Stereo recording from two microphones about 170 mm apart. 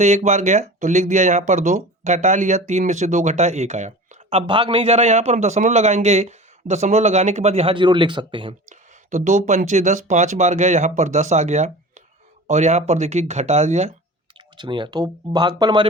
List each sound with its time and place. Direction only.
0.0 s speech: 40° right (ahead or behind)
8.7 s speech: 45° right (ahead or behind)
14.3 s speech: 25° right (ahead or behind)